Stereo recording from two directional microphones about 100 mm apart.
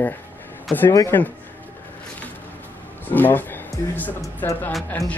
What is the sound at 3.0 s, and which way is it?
Speech, 20° left (ahead or behind).